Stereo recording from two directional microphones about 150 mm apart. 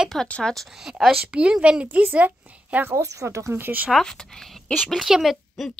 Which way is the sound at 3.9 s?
5° left (ahead or behind).